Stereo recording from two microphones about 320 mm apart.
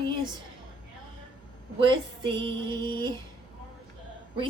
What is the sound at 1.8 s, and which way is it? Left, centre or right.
A woman's voice, centre.